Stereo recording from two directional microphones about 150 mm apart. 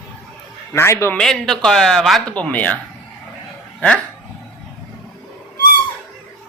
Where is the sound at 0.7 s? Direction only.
20° left (ahead or behind).